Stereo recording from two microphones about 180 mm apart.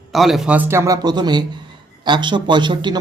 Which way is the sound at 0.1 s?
Centre (ahead or behind).